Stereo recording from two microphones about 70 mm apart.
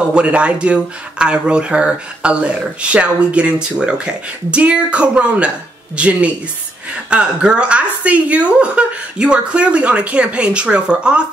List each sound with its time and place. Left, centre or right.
0.1 s speech: centre